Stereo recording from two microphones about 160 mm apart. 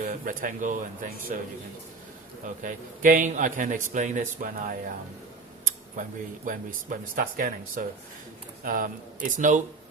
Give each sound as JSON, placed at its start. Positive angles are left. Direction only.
{"t": 0.0, "sound": "a man's voice", "side_deg": -60}
{"t": 2.4, "sound": "a man's voice", "side_deg": -55}
{"t": 6.0, "sound": "a man's voice", "side_deg": -55}